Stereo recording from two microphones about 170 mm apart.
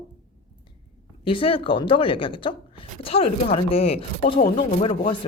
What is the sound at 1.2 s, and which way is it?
Speech, 30° left (ahead or behind).